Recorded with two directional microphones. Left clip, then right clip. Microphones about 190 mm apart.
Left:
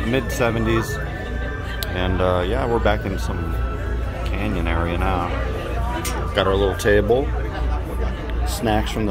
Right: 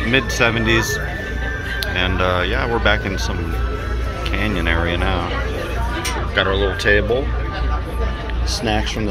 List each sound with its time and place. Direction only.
0.1 s speech: 10° left (ahead or behind)
2.0 s speech: 20° left (ahead or behind)
4.4 s speech: centre (ahead or behind)
6.3 s speech: 25° left (ahead or behind)
8.6 s speech: 15° left (ahead or behind)